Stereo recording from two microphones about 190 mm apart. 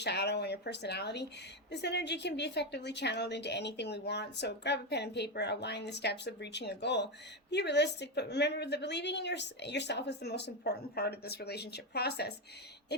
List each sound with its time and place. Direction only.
0.0 s a woman's voice: 60° left (ahead or behind)